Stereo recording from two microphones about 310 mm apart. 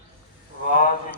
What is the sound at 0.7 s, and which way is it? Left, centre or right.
Speech, left.